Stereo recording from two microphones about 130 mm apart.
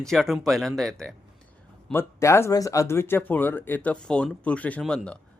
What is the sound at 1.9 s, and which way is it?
Speech, 20° left (ahead or behind).